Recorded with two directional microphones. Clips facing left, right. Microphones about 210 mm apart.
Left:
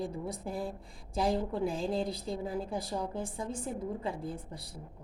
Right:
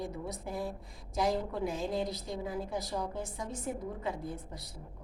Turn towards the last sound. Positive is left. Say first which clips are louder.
# left 1 dB
turn(degrees=30)  # may be behind; listen again after turning